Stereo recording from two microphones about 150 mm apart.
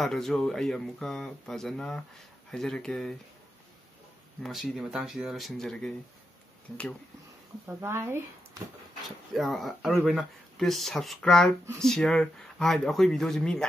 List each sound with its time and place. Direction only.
0.0 s speech: centre (ahead or behind)
4.4 s speech: centre (ahead or behind)
7.6 s speech: 15° right (ahead or behind)
9.3 s speech: centre (ahead or behind)